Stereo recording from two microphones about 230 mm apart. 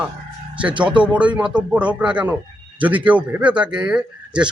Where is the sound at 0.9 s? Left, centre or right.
Centre.